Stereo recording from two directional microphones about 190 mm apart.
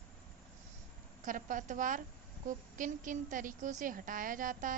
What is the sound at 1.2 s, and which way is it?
A woman's voice, 45° right (ahead or behind).